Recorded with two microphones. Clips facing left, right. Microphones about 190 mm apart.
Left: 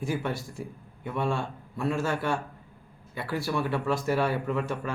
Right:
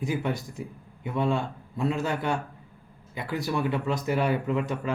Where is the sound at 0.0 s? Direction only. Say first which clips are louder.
Right 2 dB; 15° right (ahead or behind).